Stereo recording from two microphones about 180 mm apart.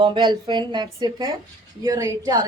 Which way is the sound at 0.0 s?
25° right (ahead or behind).